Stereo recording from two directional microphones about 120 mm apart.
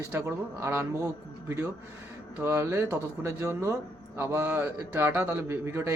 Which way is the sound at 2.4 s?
20° right (ahead or behind).